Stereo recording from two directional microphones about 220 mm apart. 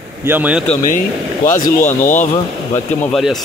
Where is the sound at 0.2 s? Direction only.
10° right (ahead or behind).